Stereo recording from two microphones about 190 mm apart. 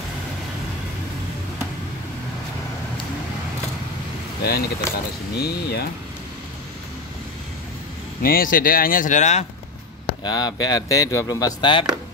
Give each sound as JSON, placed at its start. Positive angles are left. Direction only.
{"t": 4.4, "sound": "speech", "side_deg": 55}
{"t": 8.2, "sound": "speech", "side_deg": 50}
{"t": 10.2, "sound": "speech", "side_deg": 20}